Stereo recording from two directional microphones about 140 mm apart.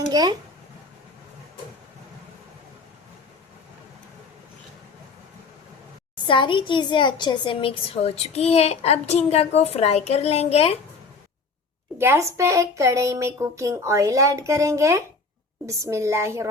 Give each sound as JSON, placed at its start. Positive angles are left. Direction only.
{"t": 0.1, "sound": "speech", "side_deg": -30}
{"t": 6.2, "sound": "a woman's voice", "side_deg": 35}
{"t": 11.9, "sound": "speech", "side_deg": -15}